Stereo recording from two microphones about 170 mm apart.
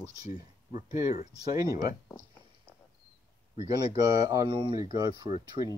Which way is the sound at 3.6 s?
25° right (ahead or behind).